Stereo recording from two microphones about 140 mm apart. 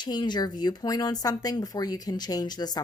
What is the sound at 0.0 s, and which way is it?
Speech, 30° left (ahead or behind).